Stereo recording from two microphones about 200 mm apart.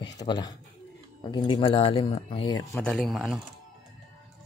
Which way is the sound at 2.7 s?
5° left (ahead or behind).